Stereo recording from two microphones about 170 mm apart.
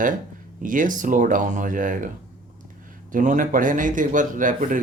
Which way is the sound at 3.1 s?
50° right (ahead or behind).